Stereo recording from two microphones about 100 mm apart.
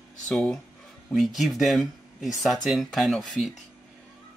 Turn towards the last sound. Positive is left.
turn(degrees=0)  # may be behind; listen again after turning